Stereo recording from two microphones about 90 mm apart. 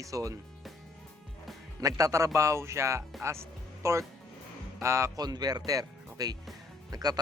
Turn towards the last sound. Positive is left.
turn(degrees=-45)  # may be behind; listen again after turning